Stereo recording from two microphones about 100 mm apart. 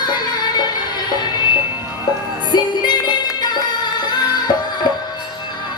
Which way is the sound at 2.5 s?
45° left (ahead or behind).